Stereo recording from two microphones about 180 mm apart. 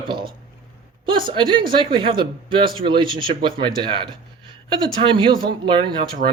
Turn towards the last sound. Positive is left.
turn(degrees=-25)  # may be behind; listen again after turning